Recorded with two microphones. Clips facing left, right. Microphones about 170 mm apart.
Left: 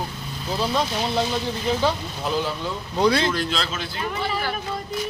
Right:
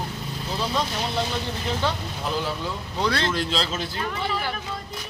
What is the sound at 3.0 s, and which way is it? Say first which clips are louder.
Speech: left 5 dB; 15° left (ahead or behind).